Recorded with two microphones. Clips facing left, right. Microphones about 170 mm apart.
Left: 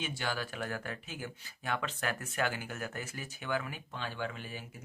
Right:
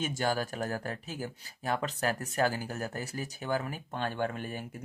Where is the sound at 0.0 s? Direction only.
45° right (ahead or behind).